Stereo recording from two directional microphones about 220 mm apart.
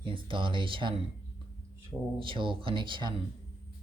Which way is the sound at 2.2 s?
25° right (ahead or behind).